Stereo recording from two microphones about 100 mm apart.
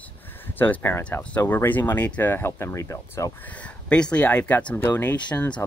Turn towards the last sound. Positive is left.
turn(degrees=15)  # may be behind; listen again after turning